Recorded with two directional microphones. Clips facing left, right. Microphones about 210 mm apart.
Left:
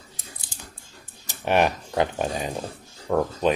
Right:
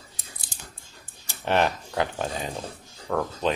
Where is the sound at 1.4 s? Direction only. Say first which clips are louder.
Left 2 dB; 15° left (ahead or behind).